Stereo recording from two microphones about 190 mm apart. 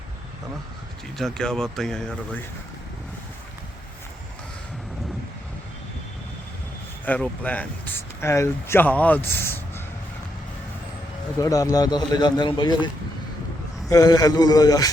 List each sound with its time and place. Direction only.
1.2 s speech: 5° left (ahead or behind)
7.0 s speech: 10° left (ahead or behind)
11.3 s speech: 15° left (ahead or behind)